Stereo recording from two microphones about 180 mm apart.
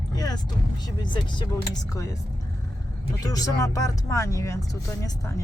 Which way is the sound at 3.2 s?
20° left (ahead or behind).